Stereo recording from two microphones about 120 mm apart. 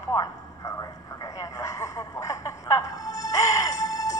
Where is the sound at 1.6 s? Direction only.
25° left (ahead or behind).